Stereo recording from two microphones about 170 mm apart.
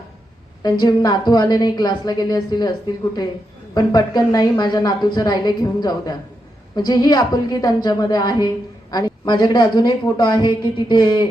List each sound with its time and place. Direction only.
0.6 s a woman's voice: 25° left (ahead or behind)